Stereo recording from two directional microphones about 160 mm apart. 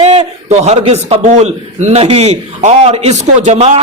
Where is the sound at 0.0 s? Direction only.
45° right (ahead or behind).